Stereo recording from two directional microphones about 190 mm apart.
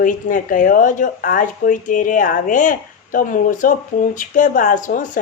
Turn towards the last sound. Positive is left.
turn(degrees=45)  # may be behind; listen again after turning